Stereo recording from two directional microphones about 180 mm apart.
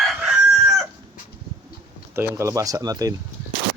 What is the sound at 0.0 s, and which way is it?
Chicken, 5° right (ahead or behind).